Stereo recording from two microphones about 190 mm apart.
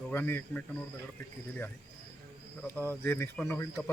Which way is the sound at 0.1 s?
10° left (ahead or behind).